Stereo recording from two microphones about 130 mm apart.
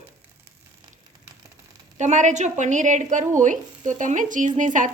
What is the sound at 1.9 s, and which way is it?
Speech, 70° right (ahead or behind).